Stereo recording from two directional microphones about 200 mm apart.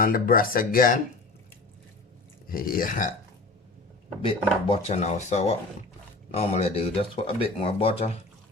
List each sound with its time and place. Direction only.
0.0 s speech: 45° left (ahead or behind)
2.5 s speech: 45° left (ahead or behind)
4.2 s speech: 25° left (ahead or behind)